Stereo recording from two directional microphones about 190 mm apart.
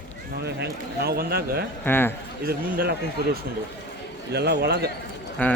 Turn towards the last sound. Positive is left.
turn(degrees=10)  # may be behind; listen again after turning